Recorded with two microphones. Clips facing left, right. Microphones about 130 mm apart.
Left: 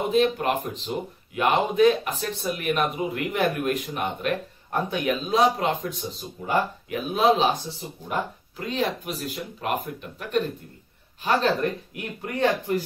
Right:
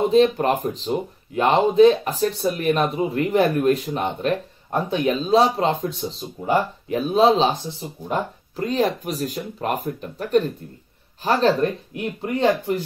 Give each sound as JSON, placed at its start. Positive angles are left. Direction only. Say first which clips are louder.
{"t": 0.1, "sound": "speech", "louder": "right 5 dB", "side_deg": -35}